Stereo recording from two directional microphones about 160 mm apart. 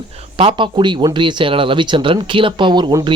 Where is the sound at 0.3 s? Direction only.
35° right (ahead or behind).